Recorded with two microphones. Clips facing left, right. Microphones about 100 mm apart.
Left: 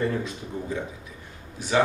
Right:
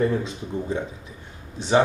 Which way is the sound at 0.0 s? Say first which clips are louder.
Right 4 dB; 20° right (ahead or behind).